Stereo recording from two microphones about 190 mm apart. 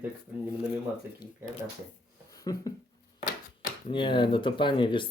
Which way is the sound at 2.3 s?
20° left (ahead or behind).